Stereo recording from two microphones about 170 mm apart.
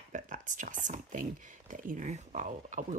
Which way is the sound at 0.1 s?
50° right (ahead or behind).